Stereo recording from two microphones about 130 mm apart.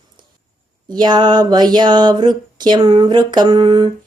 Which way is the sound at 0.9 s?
35° right (ahead or behind).